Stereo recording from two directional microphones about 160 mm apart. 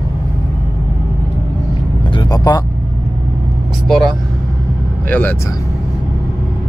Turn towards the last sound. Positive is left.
turn(degrees=10)  # may be behind; listen again after turning